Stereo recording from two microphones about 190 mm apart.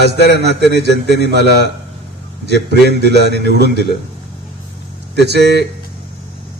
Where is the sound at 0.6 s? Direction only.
60° right (ahead or behind).